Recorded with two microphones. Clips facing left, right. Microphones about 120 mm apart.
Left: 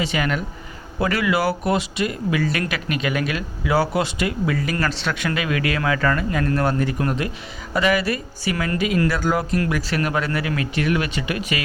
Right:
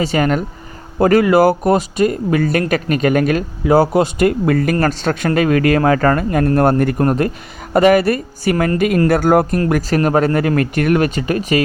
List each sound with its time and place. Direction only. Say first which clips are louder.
0.0 s speech: right 7 dB; 40° right (ahead or behind)